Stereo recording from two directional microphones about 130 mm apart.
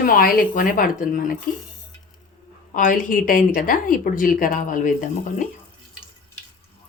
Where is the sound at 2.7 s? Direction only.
90° left.